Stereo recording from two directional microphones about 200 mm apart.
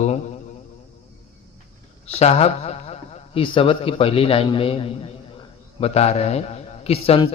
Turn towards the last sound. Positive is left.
turn(degrees=30)  # may be behind; listen again after turning